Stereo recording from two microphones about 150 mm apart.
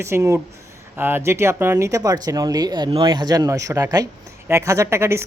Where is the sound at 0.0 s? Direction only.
20° right (ahead or behind).